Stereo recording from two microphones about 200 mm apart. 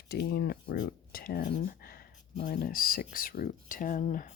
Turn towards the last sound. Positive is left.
turn(degrees=45)  # may be behind; listen again after turning